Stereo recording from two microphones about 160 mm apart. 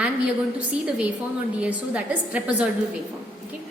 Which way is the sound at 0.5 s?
5° right (ahead or behind).